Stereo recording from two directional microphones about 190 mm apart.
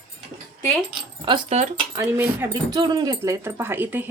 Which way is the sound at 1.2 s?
25° right (ahead or behind).